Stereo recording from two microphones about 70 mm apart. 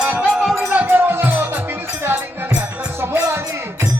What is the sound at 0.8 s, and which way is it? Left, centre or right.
Music, right.